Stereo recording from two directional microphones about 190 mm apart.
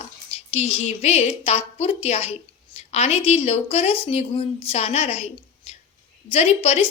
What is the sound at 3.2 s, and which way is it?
A woman's voice, 30° left (ahead or behind).